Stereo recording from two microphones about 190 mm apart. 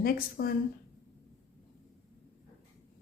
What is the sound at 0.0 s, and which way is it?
Speech, 50° left (ahead or behind).